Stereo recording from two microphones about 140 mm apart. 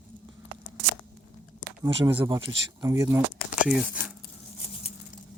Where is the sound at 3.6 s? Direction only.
5° right (ahead or behind).